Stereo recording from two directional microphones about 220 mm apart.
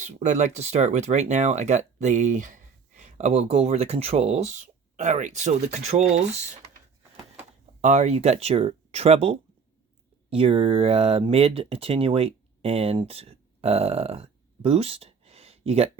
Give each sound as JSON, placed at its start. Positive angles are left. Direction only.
{"t": 0.0, "sound": "speech", "side_deg": -30}
{"t": 7.8, "sound": "speech", "side_deg": -30}